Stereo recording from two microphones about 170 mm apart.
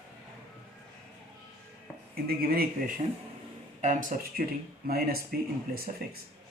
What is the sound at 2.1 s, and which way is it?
Speech, 65° right (ahead or behind).